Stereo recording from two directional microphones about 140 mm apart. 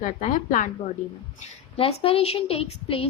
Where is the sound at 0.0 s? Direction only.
65° left (ahead or behind).